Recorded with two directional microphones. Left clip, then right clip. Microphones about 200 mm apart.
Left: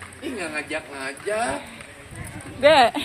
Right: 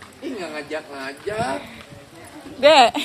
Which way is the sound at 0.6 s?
45° left (ahead or behind).